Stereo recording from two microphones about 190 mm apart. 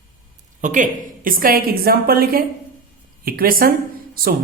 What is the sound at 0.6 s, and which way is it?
A man's voice, 40° right (ahead or behind).